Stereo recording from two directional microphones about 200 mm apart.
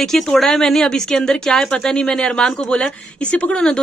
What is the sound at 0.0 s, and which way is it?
Speech, centre (ahead or behind).